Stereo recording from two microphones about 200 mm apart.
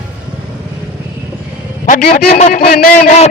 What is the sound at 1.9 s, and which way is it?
A man's voice, 50° left (ahead or behind).